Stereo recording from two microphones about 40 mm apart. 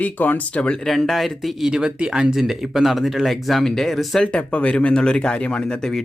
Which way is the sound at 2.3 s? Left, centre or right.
Centre.